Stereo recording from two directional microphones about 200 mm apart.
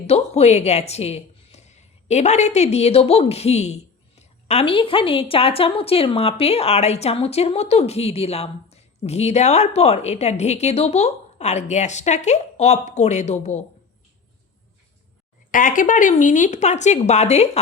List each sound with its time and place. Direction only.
0.1 s speech: 35° left (ahead or behind)
15.5 s speech: 40° left (ahead or behind)